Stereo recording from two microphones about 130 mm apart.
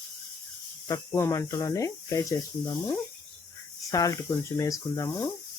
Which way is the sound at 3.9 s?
25° left (ahead or behind).